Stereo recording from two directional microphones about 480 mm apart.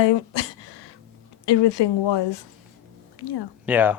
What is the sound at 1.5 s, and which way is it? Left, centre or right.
A woman's voice, left.